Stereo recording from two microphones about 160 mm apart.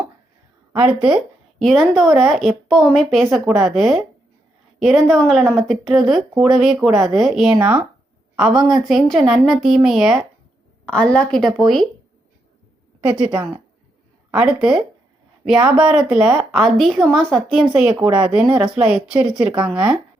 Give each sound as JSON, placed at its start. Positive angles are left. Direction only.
{"t": 0.7, "sound": "a woman's voice", "side_deg": -10}
{"t": 13.1, "sound": "a woman's voice", "side_deg": -10}
{"t": 18.0, "sound": "speech", "side_deg": -30}
{"t": 18.3, "sound": "a woman's voice", "side_deg": -5}